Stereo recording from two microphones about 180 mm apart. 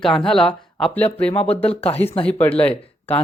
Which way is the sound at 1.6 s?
35° left (ahead or behind).